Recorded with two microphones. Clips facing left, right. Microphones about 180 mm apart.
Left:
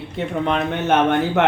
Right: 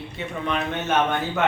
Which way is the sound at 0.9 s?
60° left (ahead or behind).